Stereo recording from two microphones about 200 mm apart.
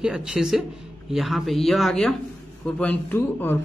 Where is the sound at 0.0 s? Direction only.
5° right (ahead or behind).